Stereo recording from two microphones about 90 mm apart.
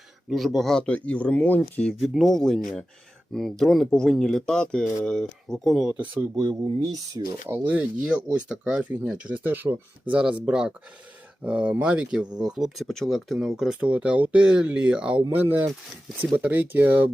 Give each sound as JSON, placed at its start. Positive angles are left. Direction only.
{"t": 0.3, "sound": "speech", "side_deg": 0}
{"t": 1.9, "sound": "speech", "side_deg": -5}
{"t": 6.5, "sound": "speech", "side_deg": -65}
{"t": 7.4, "sound": "speech", "side_deg": -25}